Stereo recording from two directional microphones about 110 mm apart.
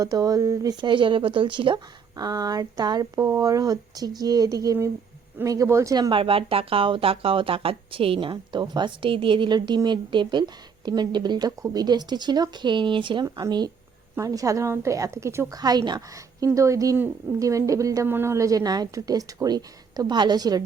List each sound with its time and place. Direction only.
0.0 s a woman's voice: 35° right (ahead or behind)
15.6 s speech: 40° right (ahead or behind)
16.5 s a woman's voice: 30° right (ahead or behind)